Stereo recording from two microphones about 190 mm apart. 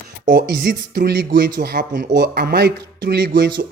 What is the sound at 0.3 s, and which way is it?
Speech, 50° right (ahead or behind).